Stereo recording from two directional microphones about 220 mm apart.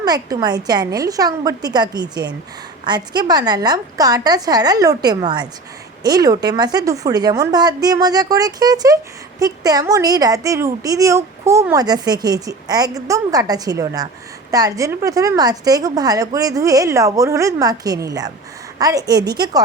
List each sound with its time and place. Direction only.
0.0 s a woman's voice: 15° right (ahead or behind)